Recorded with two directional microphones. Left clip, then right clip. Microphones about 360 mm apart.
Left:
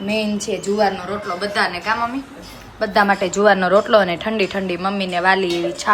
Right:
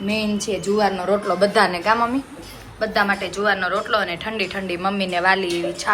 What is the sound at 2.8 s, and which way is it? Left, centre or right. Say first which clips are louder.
A woman's voice: left 4 dB; centre.